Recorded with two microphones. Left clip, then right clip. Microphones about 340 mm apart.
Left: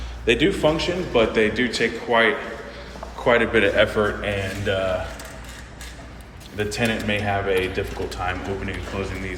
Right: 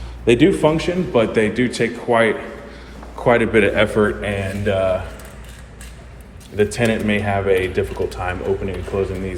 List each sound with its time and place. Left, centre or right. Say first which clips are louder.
0.3 s a man's voice: right 4 dB; centre
6.6 s speech: right 6 dB; right